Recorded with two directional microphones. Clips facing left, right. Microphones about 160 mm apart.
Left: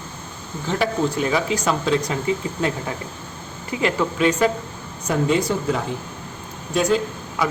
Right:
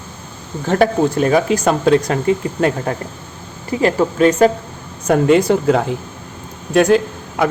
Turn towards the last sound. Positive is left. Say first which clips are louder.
# right 6 dB
turn(degrees=-60)  # may be behind; listen again after turning